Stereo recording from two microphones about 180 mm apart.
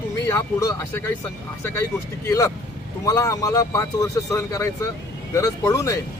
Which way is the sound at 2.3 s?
15° left (ahead or behind).